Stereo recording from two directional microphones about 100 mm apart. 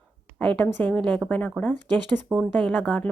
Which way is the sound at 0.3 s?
15° left (ahead or behind).